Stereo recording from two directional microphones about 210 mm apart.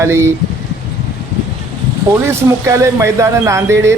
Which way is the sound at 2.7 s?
15° right (ahead or behind).